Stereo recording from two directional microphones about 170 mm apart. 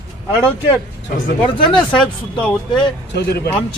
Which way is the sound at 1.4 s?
30° left (ahead or behind).